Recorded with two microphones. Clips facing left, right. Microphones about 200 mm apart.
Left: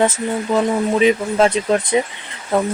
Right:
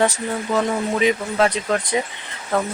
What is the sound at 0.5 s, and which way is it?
Speech, 20° left (ahead or behind).